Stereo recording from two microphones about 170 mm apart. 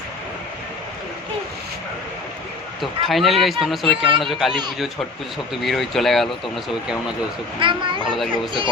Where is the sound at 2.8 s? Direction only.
Centre (ahead or behind).